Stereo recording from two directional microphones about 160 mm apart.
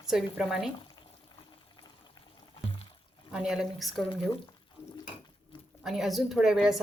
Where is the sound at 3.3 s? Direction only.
5° right (ahead or behind).